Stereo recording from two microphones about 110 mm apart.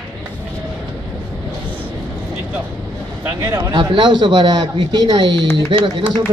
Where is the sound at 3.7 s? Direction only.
45° right (ahead or behind).